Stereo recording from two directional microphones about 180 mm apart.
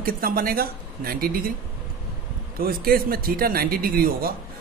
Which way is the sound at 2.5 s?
55° right (ahead or behind).